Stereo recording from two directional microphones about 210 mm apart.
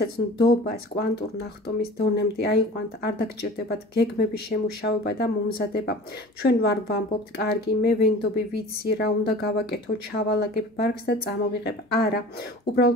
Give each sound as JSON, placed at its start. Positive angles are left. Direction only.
{"t": 0.0, "sound": "speech", "side_deg": 50}